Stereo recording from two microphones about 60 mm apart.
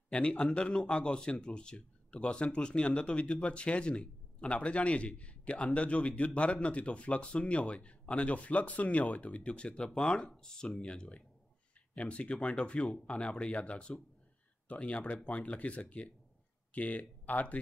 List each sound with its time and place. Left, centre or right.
0.1 s speech: centre